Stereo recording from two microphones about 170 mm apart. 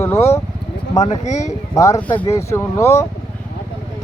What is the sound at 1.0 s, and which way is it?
Speech, 45° left (ahead or behind).